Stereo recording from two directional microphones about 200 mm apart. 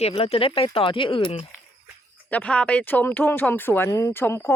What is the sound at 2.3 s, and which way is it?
Speech, 5° left (ahead or behind).